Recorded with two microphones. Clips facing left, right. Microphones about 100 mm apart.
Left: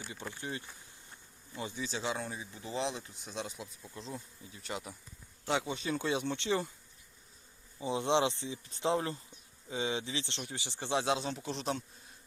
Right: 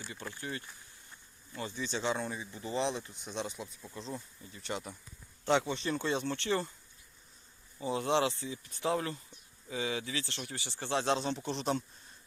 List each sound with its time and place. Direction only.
0.0 s speech: 15° left (ahead or behind)
7.8 s speech: 20° left (ahead or behind); by 11.8 s centre (ahead or behind)